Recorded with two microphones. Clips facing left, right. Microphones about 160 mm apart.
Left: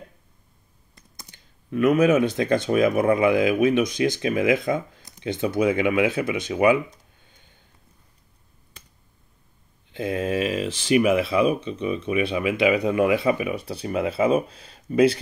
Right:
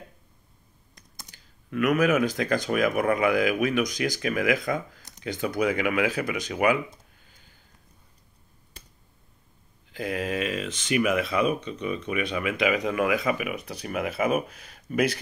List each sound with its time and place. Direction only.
1.3 s speech: 25° left (ahead or behind)
9.9 s speech: 25° left (ahead or behind)